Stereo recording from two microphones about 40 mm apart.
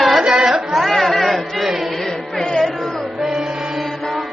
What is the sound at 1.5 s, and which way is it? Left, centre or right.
Chant, centre.